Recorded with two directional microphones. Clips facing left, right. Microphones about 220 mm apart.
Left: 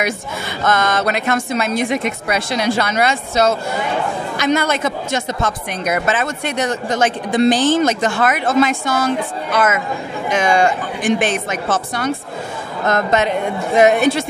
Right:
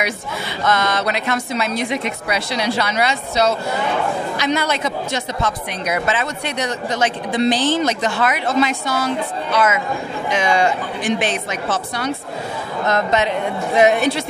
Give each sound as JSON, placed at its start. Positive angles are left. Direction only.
{"t": 0.7, "sound": "speech", "side_deg": 50}